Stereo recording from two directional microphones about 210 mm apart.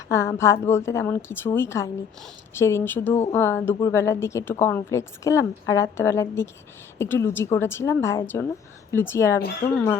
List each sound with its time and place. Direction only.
0.1 s a woman's voice: 15° left (ahead or behind)